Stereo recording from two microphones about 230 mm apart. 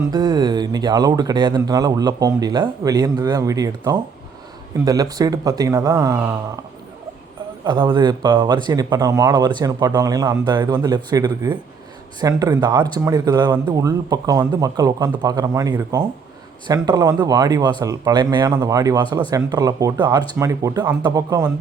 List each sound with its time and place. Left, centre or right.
0.1 s speech: centre
7.6 s speech: right